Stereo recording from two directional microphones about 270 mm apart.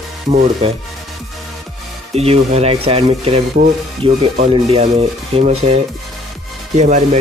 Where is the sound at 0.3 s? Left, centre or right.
Right.